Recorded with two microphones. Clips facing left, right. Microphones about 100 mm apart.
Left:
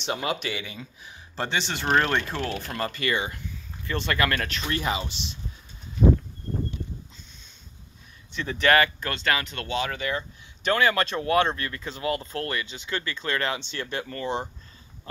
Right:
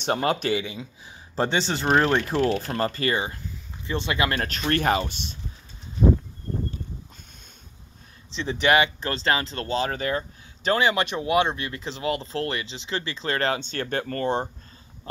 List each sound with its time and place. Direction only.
0.0 s speech: 45° right (ahead or behind)
1.0 s speech: 30° right (ahead or behind)
1.9 s speech: 10° right (ahead or behind)
2.4 s speech: 40° right (ahead or behind)
3.8 s speech: 20° right (ahead or behind)
4.4 s speech: 40° right (ahead or behind)
4.6 s speech: 55° right (ahead or behind)
8.4 s speech: 20° right (ahead or behind)
9.1 s speech: 30° right (ahead or behind); by 14.5 s 50° right (ahead or behind)